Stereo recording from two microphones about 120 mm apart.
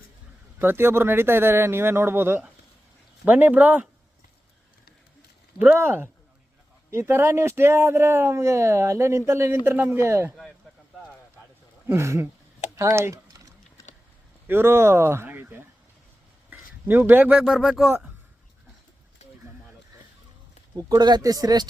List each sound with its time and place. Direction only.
0.6 s speech: 20° right (ahead or behind)
5.5 s speech: 15° right (ahead or behind)
11.9 s speech: 25° right (ahead or behind)
12.7 s typing: 25° right (ahead or behind)
14.4 s a man's voice: 20° right (ahead or behind)
19.2 s a sound: 65° left (ahead or behind)
20.7 s speech: 35° right (ahead or behind)